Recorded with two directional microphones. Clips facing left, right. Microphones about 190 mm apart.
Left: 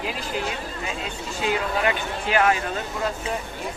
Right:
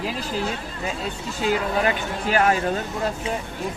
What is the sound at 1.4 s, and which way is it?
Speech, 40° right (ahead or behind).